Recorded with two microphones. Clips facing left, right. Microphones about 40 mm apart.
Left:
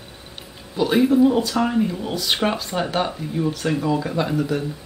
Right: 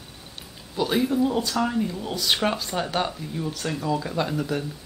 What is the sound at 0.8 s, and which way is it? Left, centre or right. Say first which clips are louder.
Speech: left 6 dB; centre.